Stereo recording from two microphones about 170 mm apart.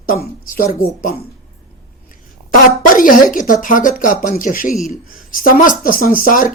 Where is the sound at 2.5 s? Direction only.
55° left (ahead or behind).